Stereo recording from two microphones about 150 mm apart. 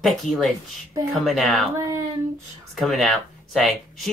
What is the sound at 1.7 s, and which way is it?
Speech, 20° right (ahead or behind).